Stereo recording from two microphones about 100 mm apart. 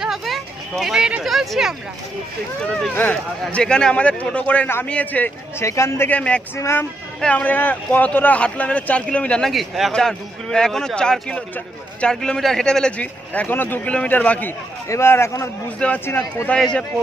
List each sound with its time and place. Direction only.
0.0 s speech: centre (ahead or behind)
2.9 s a man's voice: 20° left (ahead or behind)
3.5 s speech: 10° left (ahead or behind)
5.6 s a man's voice: 30° left (ahead or behind)
6.0 s speech: 15° left (ahead or behind)
6.5 s a man's voice: 25° left (ahead or behind)
7.2 s speech: 10° left (ahead or behind)
9.5 s speech: centre (ahead or behind); by 14.5 s 15° left (ahead or behind)
14.9 s a man's voice: 25° left (ahead or behind)
15.8 s speech: 10° left (ahead or behind)